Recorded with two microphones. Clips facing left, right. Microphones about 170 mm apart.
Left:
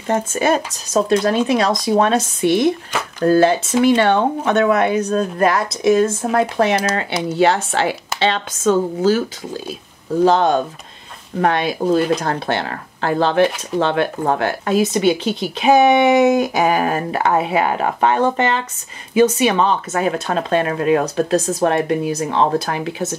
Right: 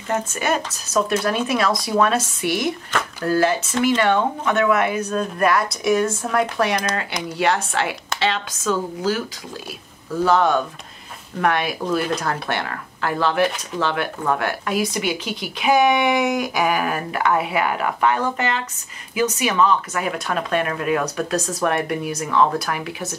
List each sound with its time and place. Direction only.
0.1 s speech: 30° left (ahead or behind)